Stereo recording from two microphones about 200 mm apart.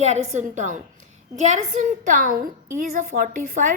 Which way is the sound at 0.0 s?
35° right (ahead or behind).